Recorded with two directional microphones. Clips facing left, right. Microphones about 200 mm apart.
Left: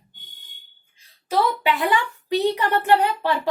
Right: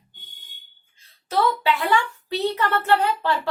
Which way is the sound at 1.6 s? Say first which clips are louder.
Even; 15° left (ahead or behind).